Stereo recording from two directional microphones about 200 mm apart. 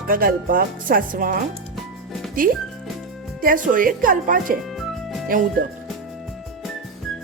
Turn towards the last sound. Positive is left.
turn(degrees=-45)  # may be behind; listen again after turning